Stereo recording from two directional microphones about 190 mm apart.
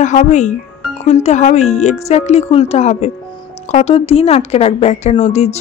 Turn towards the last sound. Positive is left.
turn(degrees=35)  # may be behind; listen again after turning